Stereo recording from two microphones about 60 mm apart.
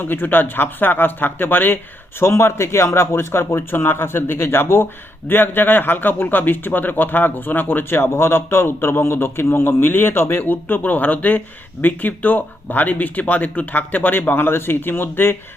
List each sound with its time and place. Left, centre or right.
0.0 s a man's voice: left